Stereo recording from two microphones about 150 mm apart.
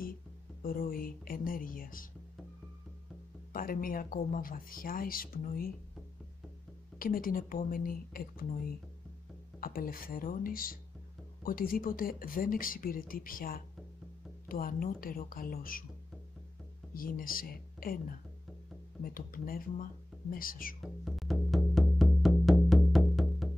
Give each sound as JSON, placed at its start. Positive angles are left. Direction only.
{"t": 0.6, "sound": "speech", "side_deg": 75}
{"t": 3.5, "sound": "speech", "side_deg": 70}
{"t": 7.0, "sound": "speech", "side_deg": 70}
{"t": 16.9, "sound": "speech", "side_deg": 70}
{"t": 19.1, "sound": "speech", "side_deg": 75}
{"t": 20.8, "sound": "music", "side_deg": 0}